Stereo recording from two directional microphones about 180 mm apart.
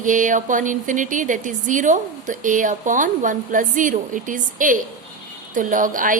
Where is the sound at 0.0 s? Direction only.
45° right (ahead or behind).